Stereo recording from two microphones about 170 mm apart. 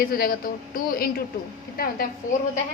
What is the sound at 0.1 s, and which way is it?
A woman's voice, 60° left (ahead or behind).